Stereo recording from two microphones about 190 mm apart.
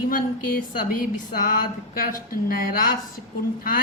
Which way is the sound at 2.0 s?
50° left (ahead or behind).